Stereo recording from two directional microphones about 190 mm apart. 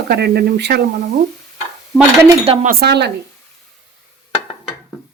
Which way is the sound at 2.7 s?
55° right (ahead or behind).